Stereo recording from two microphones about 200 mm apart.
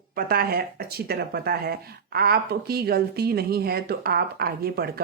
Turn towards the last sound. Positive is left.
turn(degrees=-50)  # may be behind; listen again after turning